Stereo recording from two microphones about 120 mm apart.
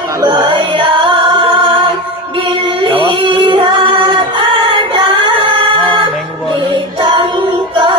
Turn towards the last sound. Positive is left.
turn(degrees=-45)  # may be behind; listen again after turning